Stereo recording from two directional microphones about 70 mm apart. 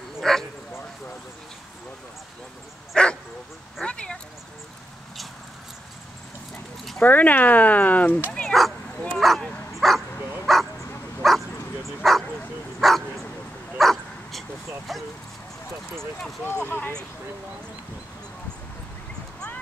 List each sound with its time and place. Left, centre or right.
0.2 s bow-wow: centre
2.9 s bow-wow: centre
3.8 s a sound: centre
7.0 s speech: left
8.3 s bow-wow: centre
9.2 s dog: centre
9.8 s bow-wow: centre
13.7 s dog: centre
14.9 s speech: centre
16.6 s speech: left